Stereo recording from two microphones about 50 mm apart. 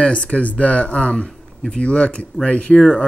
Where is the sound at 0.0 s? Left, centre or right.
Left.